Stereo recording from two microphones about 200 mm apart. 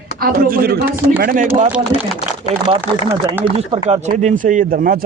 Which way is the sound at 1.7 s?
5° right (ahead or behind).